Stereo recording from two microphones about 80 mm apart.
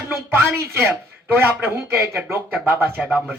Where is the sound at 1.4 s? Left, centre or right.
Right.